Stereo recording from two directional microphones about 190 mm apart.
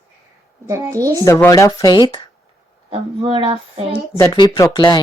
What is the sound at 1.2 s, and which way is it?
Speech, 15° left (ahead or behind).